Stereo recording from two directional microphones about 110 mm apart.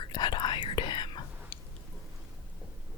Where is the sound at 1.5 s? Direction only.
20° left (ahead or behind).